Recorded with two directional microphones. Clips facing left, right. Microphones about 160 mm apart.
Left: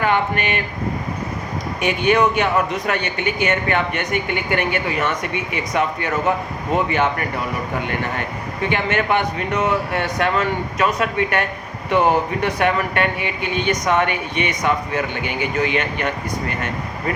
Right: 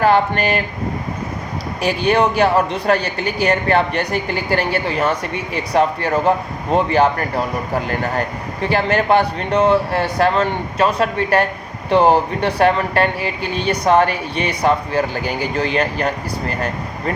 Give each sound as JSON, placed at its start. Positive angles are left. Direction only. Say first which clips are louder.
{"t": 0.0, "sound": "speech", "louder": "right 5 dB", "side_deg": -35}
{"t": 1.8, "sound": "speech", "louder": "right 1 dB", "side_deg": -35}